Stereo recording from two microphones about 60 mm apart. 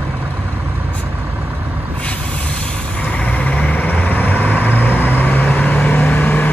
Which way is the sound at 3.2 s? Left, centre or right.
Left.